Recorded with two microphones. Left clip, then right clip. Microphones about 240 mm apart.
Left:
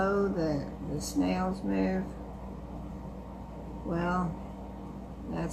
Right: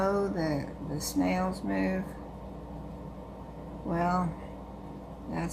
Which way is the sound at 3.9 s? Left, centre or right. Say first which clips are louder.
Right 3 dB; right.